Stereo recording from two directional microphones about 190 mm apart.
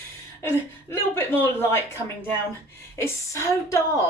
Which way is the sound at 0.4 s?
10° left (ahead or behind).